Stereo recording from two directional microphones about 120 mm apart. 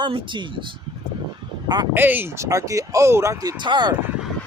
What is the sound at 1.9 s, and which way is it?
Speech, 15° right (ahead or behind).